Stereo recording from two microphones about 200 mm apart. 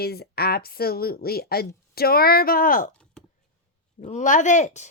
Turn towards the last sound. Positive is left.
turn(degrees=35)  # may be behind; listen again after turning